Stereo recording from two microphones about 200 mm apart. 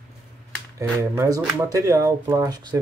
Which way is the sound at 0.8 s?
15° right (ahead or behind).